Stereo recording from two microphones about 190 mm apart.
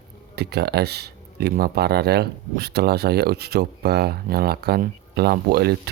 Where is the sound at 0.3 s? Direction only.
60° right (ahead or behind).